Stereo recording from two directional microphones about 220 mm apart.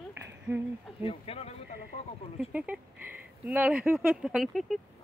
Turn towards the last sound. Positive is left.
turn(degrees=0)  # may be behind; listen again after turning